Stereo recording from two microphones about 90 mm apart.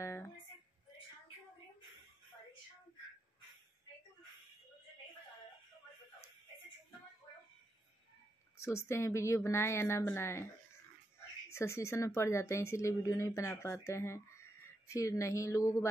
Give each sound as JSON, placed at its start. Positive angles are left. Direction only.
{"t": 0.0, "sound": "a sound", "side_deg": 30}
{"t": 8.5, "sound": "speech", "side_deg": 30}
{"t": 11.5, "sound": "speech", "side_deg": 30}